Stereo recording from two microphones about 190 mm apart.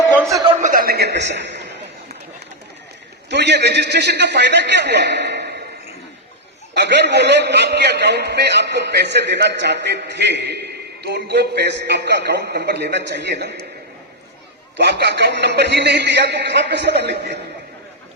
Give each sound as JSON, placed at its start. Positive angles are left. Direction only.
{"t": 0.4, "sound": "chuckle", "side_deg": -35}
{"t": 3.2, "sound": "a man's voice", "side_deg": -65}
{"t": 6.7, "sound": "a man's voice", "side_deg": -65}
{"t": 14.8, "sound": "a man's voice", "side_deg": -60}